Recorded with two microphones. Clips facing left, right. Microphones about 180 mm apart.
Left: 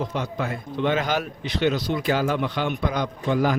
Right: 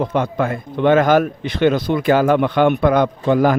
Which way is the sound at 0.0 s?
55° right (ahead or behind).